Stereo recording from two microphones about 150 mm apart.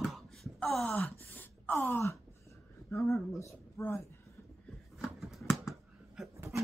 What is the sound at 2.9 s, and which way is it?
Speech, 20° left (ahead or behind).